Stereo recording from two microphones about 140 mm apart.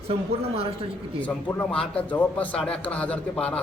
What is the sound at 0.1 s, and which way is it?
Speech, 45° right (ahead or behind).